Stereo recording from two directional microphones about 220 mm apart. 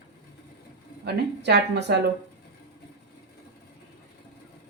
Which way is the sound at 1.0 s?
50° right (ahead or behind).